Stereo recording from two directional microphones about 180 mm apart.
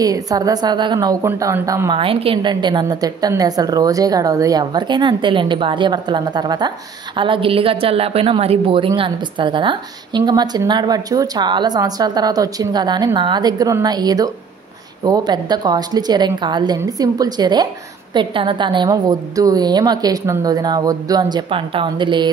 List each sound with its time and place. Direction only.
0.0 s a woman's voice: 20° right (ahead or behind)
2.0 s a woman's voice: 30° right (ahead or behind)